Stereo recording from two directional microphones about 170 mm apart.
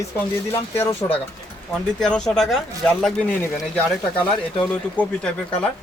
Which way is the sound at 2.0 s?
5° left (ahead or behind).